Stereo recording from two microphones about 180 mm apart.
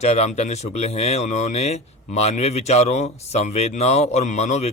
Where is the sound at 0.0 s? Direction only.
35° left (ahead or behind).